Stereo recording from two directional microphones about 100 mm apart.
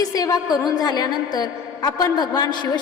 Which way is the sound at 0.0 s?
40° left (ahead or behind).